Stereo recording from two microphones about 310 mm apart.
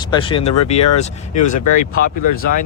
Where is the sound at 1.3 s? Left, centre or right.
Left.